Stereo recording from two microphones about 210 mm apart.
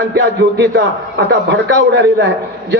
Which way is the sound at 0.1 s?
55° right (ahead or behind).